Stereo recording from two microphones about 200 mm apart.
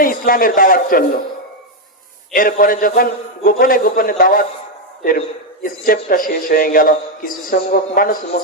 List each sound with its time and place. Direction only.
0.0 s a man's voice: 45° left (ahead or behind)
2.3 s a man's voice: 45° left (ahead or behind)
5.6 s a man's voice: 45° left (ahead or behind)